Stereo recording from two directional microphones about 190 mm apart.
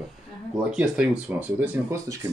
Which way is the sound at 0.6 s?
5° right (ahead or behind).